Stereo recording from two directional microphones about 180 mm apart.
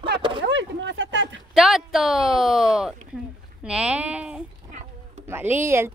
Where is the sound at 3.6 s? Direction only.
5° right (ahead or behind).